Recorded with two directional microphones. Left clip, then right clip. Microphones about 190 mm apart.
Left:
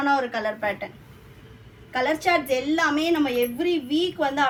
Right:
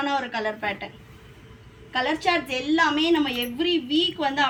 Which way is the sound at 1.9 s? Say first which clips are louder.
Left 1 dB; 20° left (ahead or behind).